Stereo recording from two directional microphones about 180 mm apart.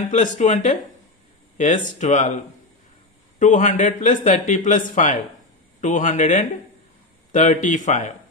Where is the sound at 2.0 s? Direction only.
40° left (ahead or behind).